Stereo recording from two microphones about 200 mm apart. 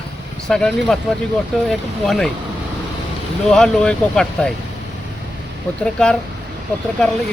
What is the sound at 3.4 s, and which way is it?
Speech, 5° left (ahead or behind).